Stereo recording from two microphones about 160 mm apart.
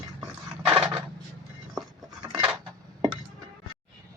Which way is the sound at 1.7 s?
5° right (ahead or behind).